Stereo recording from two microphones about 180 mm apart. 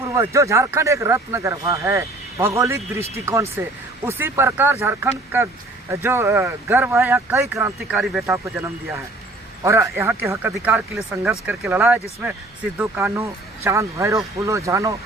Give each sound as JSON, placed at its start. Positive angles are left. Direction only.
{"t": 0.1, "sound": "speech", "side_deg": -15}